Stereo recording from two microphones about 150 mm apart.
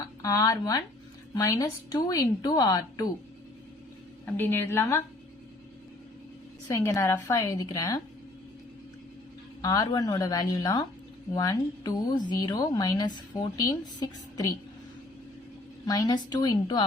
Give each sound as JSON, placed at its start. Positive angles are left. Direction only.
{"t": 0.2, "sound": "speech", "side_deg": 25}
{"t": 4.3, "sound": "a woman's voice", "side_deg": 15}
{"t": 6.7, "sound": "speech", "side_deg": 20}
{"t": 9.6, "sound": "speech", "side_deg": 25}
{"t": 15.9, "sound": "speech", "side_deg": 25}